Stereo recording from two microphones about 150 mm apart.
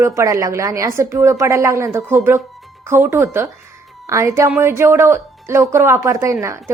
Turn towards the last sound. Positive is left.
turn(degrees=-20)  # may be behind; listen again after turning